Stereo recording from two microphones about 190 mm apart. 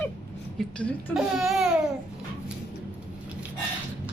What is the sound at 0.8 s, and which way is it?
Speech, centre (ahead or behind).